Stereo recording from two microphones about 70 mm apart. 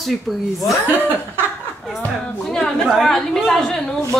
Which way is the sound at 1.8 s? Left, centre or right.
Centre.